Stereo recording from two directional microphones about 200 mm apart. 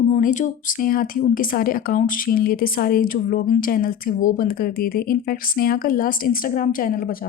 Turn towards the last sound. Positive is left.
turn(degrees=45)  # may be behind; listen again after turning